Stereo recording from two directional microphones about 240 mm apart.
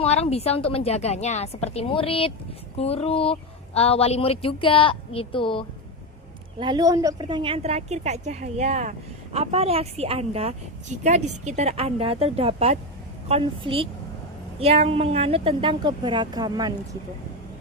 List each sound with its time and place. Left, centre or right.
0.0 s a woman's voice: left
6.6 s a woman's voice: centre